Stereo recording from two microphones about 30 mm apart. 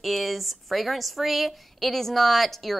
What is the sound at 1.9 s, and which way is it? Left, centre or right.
Speech, centre.